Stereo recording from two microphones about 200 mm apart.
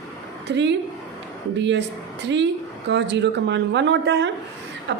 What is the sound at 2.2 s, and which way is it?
A woman's voice, 65° right (ahead or behind).